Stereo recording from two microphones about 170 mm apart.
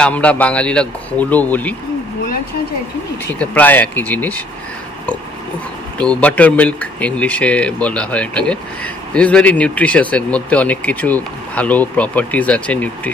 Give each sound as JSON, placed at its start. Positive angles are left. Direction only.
{"t": 0.0, "sound": "speech", "side_deg": 5}
{"t": 3.3, "sound": "speech", "side_deg": 10}
{"t": 5.9, "sound": "speech", "side_deg": 5}